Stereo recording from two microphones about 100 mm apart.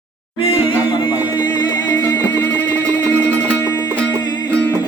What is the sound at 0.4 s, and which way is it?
Music, 65° left (ahead or behind).